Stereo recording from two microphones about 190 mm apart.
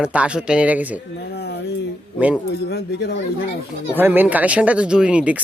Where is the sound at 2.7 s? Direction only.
60° left (ahead or behind).